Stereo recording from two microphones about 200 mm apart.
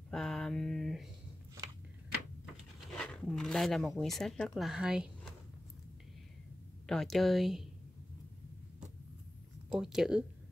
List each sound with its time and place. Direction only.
0.1 s a sound: centre (ahead or behind)
2.9 s speech: 5° left (ahead or behind)
6.9 s speech: centre (ahead or behind)
9.7 s speech: centre (ahead or behind)